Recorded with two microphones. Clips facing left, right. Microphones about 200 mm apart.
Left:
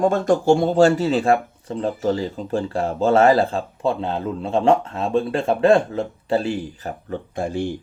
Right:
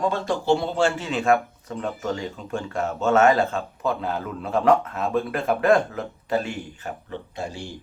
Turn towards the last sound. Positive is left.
turn(degrees=55)  # may be behind; listen again after turning